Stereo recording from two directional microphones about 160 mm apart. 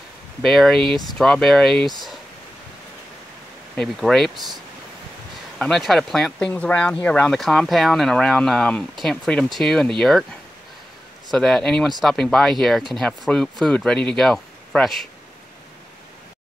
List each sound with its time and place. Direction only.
0.4 s speech: centre (ahead or behind)
3.7 s speech: centre (ahead or behind)
5.6 s speech: centre (ahead or behind)
11.2 s speech: centre (ahead or behind)